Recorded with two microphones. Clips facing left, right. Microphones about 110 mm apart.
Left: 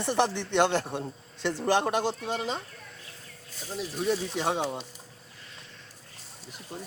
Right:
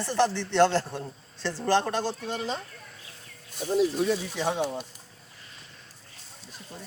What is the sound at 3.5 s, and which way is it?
Speech, 60° right (ahead or behind).